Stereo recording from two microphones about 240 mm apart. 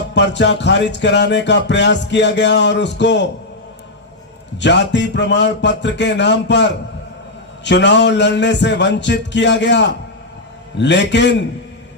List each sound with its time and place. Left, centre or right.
0.1 s music: left
4.5 s music: left